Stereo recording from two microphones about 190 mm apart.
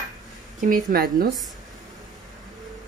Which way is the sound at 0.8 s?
45° right (ahead or behind).